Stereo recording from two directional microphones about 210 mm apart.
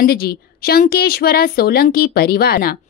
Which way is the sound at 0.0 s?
50° left (ahead or behind).